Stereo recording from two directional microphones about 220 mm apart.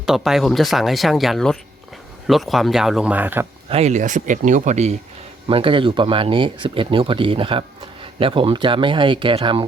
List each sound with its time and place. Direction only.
0.0 s speech: centre (ahead or behind)
3.7 s speech: 30° right (ahead or behind)